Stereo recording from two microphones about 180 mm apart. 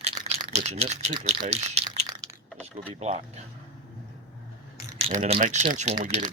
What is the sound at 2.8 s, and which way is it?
Speech, 30° right (ahead or behind).